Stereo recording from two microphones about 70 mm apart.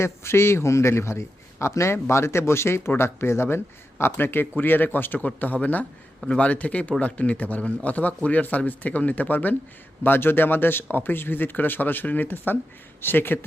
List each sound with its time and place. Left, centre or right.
0.0 s a man's voice: left